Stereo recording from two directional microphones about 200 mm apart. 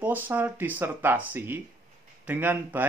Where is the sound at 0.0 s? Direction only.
10° right (ahead or behind).